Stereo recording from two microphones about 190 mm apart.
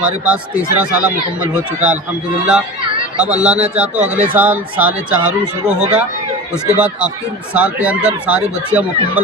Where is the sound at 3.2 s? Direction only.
5° right (ahead or behind).